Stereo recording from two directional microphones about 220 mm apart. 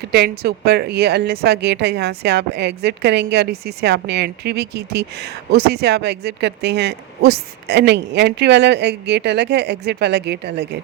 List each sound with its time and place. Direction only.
0.1 s a woman's voice: 45° right (ahead or behind)